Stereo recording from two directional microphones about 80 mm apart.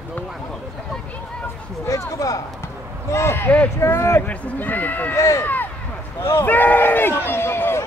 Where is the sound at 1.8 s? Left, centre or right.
Left.